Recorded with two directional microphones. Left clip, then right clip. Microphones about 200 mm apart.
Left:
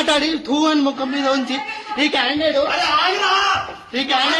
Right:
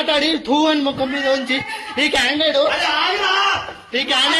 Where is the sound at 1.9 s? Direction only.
Centre (ahead or behind).